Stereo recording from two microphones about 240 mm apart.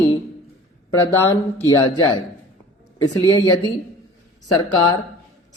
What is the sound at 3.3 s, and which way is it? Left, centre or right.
A man's voice, centre.